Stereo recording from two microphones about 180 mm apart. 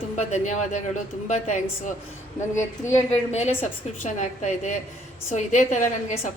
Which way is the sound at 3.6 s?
40° left (ahead or behind).